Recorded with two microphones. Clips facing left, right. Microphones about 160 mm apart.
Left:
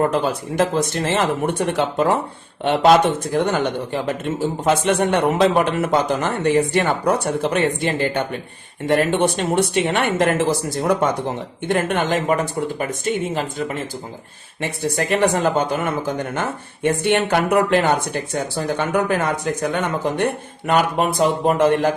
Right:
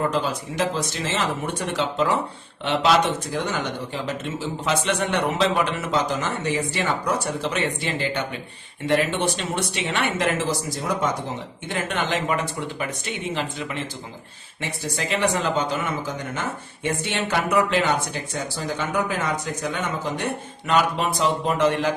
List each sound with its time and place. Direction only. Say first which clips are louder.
0.0 s speech: left 5 dB; 55° left (ahead or behind)